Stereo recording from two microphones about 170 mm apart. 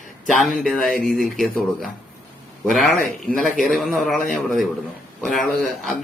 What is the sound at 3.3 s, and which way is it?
Speech, centre (ahead or behind).